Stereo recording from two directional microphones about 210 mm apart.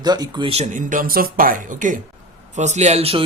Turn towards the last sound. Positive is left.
turn(degrees=-30)  # may be behind; listen again after turning